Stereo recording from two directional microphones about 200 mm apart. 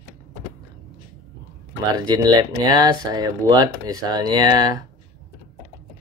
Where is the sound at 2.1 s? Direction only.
20° right (ahead or behind).